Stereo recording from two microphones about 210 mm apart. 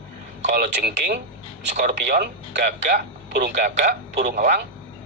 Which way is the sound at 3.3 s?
50° right (ahead or behind).